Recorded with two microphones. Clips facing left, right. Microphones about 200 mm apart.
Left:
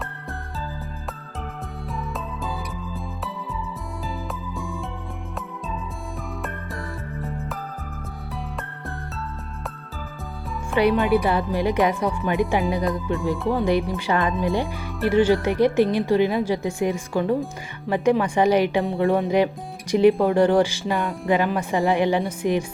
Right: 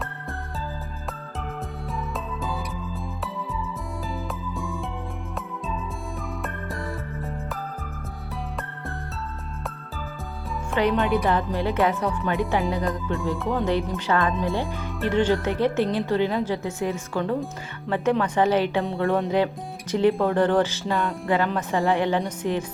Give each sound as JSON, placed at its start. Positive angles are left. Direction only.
{"t": 2.0, "sound": "music", "side_deg": 0}
{"t": 4.3, "sound": "music", "side_deg": 0}
{"t": 6.4, "sound": "music", "side_deg": 0}
{"t": 10.8, "sound": "speech", "side_deg": 10}